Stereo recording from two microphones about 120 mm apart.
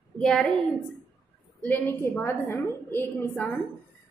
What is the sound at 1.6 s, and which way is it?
A woman's voice, 15° left (ahead or behind).